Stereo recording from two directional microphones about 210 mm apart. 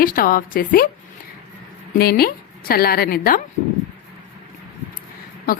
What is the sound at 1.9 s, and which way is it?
A woman's voice, 45° left (ahead or behind).